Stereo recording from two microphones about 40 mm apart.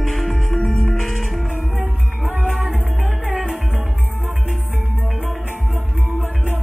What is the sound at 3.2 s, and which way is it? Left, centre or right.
Music, right.